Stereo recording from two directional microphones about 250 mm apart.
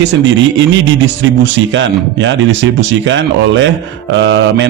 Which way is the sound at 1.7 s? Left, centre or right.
Right.